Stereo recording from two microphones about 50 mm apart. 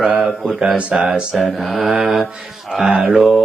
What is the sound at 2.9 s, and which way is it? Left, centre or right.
Speech, right.